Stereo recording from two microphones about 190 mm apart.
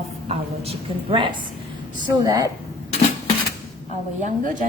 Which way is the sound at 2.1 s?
20° right (ahead or behind).